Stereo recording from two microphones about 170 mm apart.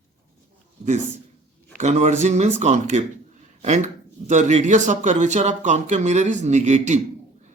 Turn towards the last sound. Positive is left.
turn(degrees=-45)  # may be behind; listen again after turning